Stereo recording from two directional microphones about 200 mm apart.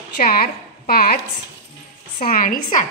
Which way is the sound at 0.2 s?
45° left (ahead or behind).